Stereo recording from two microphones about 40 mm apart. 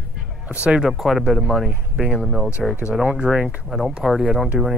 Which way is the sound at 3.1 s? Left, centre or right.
Right.